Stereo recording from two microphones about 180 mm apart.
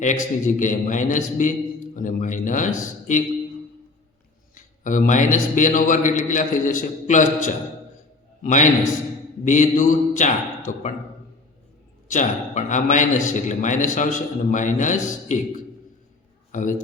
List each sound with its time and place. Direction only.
0.0 s a man's voice: 45° left (ahead or behind)
4.5 s a man's voice: 45° left (ahead or behind)
12.0 s a man's voice: 45° left (ahead or behind)
16.5 s a man's voice: 45° left (ahead or behind)